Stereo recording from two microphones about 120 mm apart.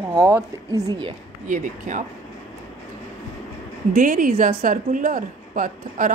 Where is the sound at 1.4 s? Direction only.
90° right.